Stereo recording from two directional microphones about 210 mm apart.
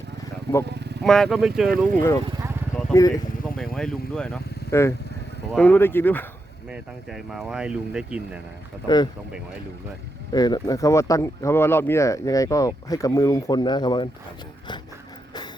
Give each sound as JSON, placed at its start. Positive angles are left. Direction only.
{"t": 0.7, "sound": "vehicle", "side_deg": -55}
{"t": 1.0, "sound": "speech", "side_deg": 0}
{"t": 1.9, "sound": "speech", "side_deg": 10}
{"t": 3.6, "sound": "speech", "side_deg": 0}
{"t": 6.7, "sound": "speech", "side_deg": -5}
{"t": 8.9, "sound": "speech", "side_deg": 20}
{"t": 10.3, "sound": "speech", "side_deg": 20}